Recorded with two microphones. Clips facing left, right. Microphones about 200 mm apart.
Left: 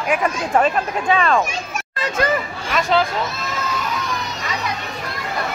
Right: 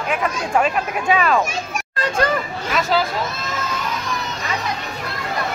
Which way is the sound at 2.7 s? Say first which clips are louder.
Left 1 dB; 5° right (ahead or behind).